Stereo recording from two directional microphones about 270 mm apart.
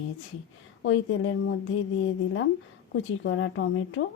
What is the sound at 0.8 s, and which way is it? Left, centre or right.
Speech, left.